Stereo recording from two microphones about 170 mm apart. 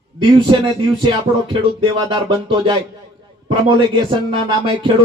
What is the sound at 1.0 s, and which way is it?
Speech, 30° right (ahead or behind).